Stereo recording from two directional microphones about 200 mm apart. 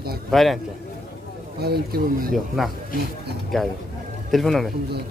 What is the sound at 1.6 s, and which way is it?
Speech, 50° right (ahead or behind).